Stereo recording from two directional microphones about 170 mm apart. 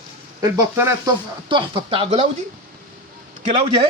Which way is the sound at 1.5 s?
30° right (ahead or behind).